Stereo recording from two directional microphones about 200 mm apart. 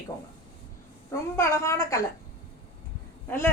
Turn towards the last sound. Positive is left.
turn(degrees=10)  # may be behind; listen again after turning